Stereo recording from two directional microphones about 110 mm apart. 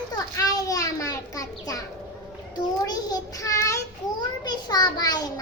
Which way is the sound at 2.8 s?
35° left (ahead or behind).